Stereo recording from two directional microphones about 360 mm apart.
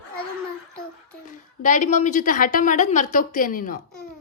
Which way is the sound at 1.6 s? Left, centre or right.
Left.